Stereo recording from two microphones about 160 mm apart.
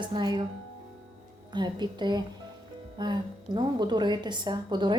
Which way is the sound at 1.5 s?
30° right (ahead or behind).